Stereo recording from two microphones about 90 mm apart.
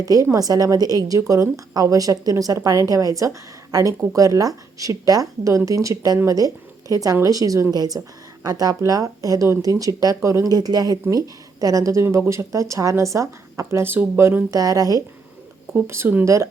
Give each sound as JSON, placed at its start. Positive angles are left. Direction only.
{"t": 0.0, "sound": "a woman's voice", "side_deg": -40}
{"t": 14.5, "sound": "a woman's voice", "side_deg": -40}
{"t": 15.7, "sound": "a woman's voice", "side_deg": -30}